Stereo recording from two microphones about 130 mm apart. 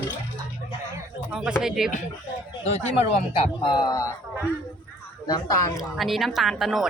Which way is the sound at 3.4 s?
35° left (ahead or behind).